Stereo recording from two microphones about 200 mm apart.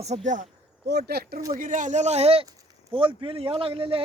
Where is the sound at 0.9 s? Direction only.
55° right (ahead or behind).